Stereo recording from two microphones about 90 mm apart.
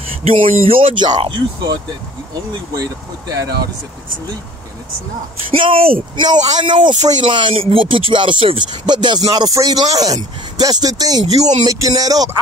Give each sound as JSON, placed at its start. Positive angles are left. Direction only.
{"t": 0.3, "sound": "speech", "side_deg": -90}
{"t": 1.2, "sound": "speech", "side_deg": -65}
{"t": 2.8, "sound": "speech", "side_deg": -45}
{"t": 5.5, "sound": "speech", "side_deg": -80}
{"t": 6.2, "sound": "speech", "side_deg": -50}